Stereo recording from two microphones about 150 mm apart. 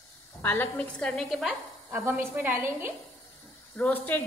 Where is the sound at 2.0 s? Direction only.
15° right (ahead or behind).